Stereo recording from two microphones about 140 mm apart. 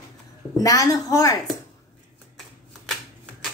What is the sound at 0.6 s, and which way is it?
Speech, 25° left (ahead or behind).